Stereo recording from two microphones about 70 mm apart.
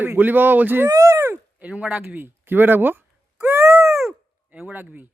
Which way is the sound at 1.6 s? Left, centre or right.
Centre.